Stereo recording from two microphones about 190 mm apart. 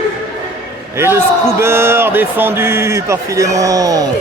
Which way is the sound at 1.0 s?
10° right (ahead or behind).